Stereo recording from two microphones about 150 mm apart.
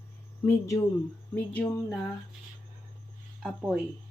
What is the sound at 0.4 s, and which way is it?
Speech, 15° left (ahead or behind).